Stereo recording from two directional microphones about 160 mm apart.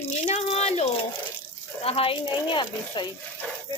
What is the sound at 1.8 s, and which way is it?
A woman's voice, 35° left (ahead or behind).